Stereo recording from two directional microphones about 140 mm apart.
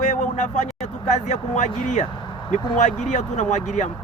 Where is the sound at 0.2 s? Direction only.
60° left (ahead or behind).